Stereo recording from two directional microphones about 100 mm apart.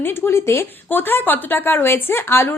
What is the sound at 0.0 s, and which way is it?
Speech, 25° left (ahead or behind).